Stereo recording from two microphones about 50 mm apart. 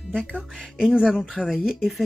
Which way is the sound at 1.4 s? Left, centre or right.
Centre.